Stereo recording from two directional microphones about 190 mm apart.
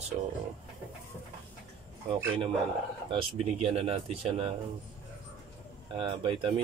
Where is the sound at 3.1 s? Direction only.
30° right (ahead or behind).